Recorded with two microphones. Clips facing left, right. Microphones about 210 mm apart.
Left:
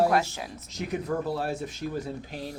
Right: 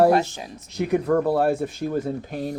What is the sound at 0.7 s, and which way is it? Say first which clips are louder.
Speech: right 9 dB; 60° right (ahead or behind).